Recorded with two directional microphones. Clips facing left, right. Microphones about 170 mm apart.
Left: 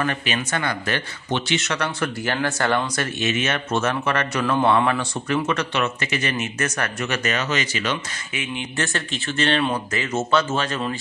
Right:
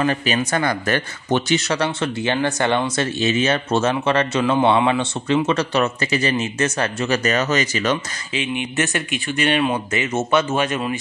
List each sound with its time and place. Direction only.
0.0 s a man's voice: 35° right (ahead or behind)
8.3 s speech: 20° right (ahead or behind)